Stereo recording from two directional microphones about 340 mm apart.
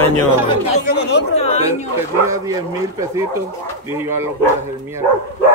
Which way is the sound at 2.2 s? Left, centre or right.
Centre.